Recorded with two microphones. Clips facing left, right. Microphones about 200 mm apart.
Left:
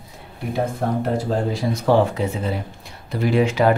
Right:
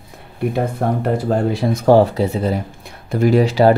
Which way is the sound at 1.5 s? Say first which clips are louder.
Right 6 dB; 45° right (ahead or behind).